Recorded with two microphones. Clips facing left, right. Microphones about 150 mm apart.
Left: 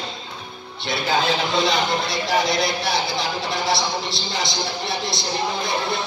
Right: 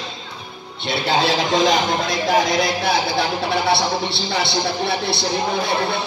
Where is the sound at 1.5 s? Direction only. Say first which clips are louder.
Right 3 dB; 45° right (ahead or behind).